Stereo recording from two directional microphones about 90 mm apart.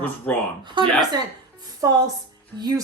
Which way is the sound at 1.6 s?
45° right (ahead or behind).